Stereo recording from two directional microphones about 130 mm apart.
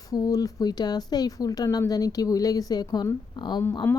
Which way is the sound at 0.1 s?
30° left (ahead or behind).